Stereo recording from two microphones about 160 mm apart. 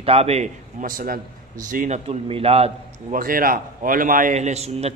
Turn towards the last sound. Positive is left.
turn(degrees=-40)  # may be behind; listen again after turning